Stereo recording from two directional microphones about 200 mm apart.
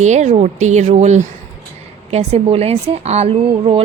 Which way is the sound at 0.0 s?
35° right (ahead or behind).